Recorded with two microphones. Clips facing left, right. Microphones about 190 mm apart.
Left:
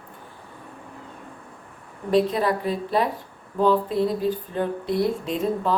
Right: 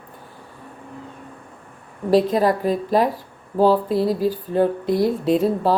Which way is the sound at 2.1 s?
40° right (ahead or behind).